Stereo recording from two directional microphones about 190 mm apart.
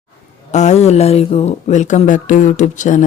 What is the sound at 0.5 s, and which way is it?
Speech, 35° left (ahead or behind).